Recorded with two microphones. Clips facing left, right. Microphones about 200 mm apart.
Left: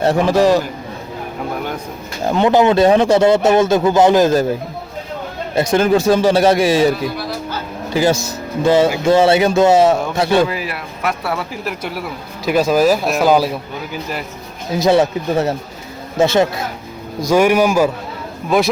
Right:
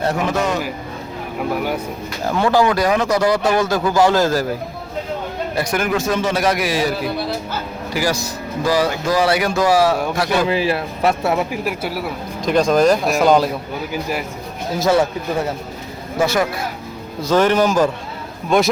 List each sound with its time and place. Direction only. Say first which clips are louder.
0.0 s a man's voice: left 6 dB; 30° left (ahead or behind)
2.2 s speech: left 3 dB; 20° left (ahead or behind)
5.5 s speech: left 7 dB; 25° left (ahead or behind)
7.9 s speech: left 6 dB; 25° left (ahead or behind)
10.5 s speech: right 6 dB; 30° right (ahead or behind)
11.8 s speech: right 1 dB; centre (ahead or behind)
14.8 s speech: left 3 dB; 20° left (ahead or behind)
17.2 s a man's voice: left 2 dB; 10° left (ahead or behind)